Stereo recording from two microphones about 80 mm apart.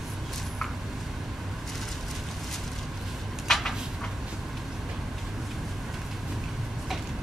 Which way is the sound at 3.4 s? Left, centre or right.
Centre.